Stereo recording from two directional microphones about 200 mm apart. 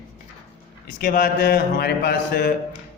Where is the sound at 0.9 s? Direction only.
45° left (ahead or behind).